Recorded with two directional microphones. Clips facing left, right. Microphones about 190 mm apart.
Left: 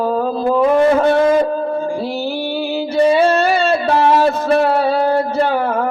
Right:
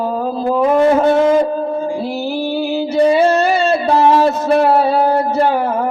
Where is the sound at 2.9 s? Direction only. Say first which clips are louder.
Right 1 dB; 20° right (ahead or behind).